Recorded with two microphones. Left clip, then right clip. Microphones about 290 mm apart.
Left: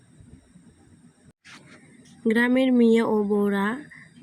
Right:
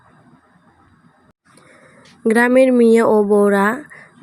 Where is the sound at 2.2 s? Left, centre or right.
Centre.